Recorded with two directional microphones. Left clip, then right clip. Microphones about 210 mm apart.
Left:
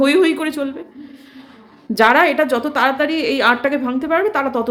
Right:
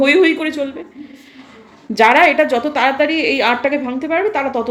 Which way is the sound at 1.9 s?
15° left (ahead or behind).